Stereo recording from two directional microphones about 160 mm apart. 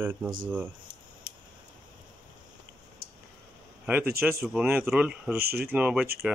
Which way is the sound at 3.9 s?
15° right (ahead or behind).